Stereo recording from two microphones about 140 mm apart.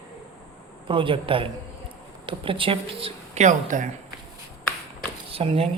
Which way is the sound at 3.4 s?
65° right (ahead or behind).